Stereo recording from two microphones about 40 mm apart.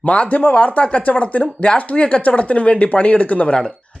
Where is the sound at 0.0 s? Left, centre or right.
Left.